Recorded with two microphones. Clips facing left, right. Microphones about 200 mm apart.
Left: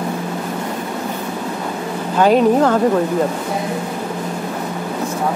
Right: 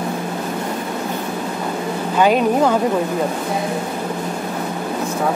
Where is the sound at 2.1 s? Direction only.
5° right (ahead or behind).